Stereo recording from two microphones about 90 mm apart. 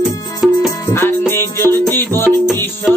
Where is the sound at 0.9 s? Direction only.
30° left (ahead or behind).